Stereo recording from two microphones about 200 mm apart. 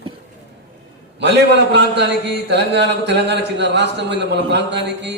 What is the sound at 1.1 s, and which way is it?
A man's voice, 60° right (ahead or behind).